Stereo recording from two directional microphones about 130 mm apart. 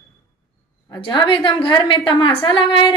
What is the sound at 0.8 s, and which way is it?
A woman's voice, 35° left (ahead or behind).